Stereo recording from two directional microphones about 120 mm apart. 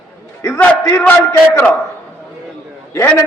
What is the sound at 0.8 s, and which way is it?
Speech, 25° left (ahead or behind).